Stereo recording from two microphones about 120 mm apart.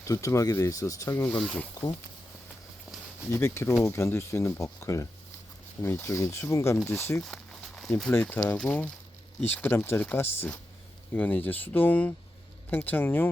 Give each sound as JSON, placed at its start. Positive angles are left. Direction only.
{"t": 0.0, "sound": "speech", "side_deg": 25}
{"t": 1.4, "sound": "speech", "side_deg": 5}
{"t": 3.3, "sound": "speech", "side_deg": 20}
{"t": 7.9, "sound": "speech", "side_deg": 5}